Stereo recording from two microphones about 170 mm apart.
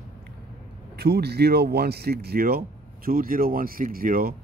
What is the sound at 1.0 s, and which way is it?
Speech, 70° right (ahead or behind).